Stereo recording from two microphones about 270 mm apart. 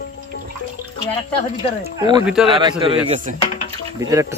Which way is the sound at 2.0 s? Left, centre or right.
Centre.